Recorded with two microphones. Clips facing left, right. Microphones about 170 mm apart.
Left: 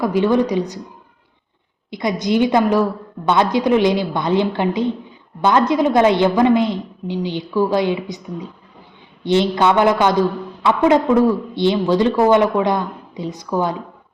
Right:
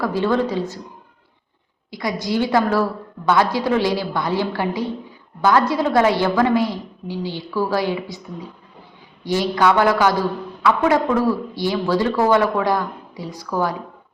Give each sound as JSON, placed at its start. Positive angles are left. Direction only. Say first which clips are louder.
{"t": 0.0, "sound": "a woman's voice", "louder": "left 3 dB", "side_deg": 15}
{"t": 1.9, "sound": "a woman's voice", "louder": "left 4 dB", "side_deg": 20}